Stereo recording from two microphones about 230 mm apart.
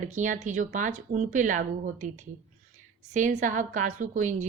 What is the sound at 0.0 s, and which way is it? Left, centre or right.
Speech, right.